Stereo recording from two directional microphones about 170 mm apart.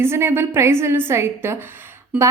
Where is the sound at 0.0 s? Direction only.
15° right (ahead or behind).